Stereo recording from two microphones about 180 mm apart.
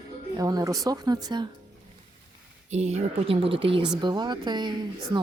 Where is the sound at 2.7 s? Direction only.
35° right (ahead or behind).